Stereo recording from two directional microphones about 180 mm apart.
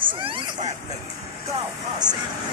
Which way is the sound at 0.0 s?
30° right (ahead or behind).